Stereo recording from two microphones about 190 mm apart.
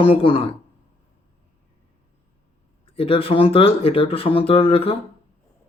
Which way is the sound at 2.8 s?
30° left (ahead or behind).